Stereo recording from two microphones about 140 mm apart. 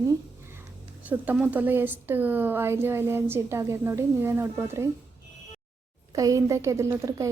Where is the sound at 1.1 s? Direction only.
10° right (ahead or behind).